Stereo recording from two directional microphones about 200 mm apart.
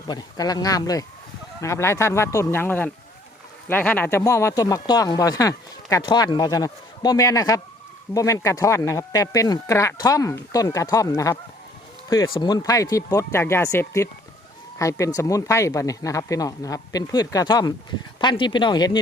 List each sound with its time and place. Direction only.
0.1 s speech: 20° left (ahead or behind)